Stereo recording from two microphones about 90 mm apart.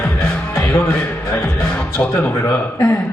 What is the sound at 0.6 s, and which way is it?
Music, 15° left (ahead or behind).